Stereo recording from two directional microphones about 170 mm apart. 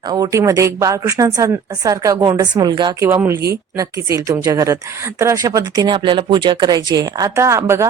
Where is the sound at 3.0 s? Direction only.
15° right (ahead or behind).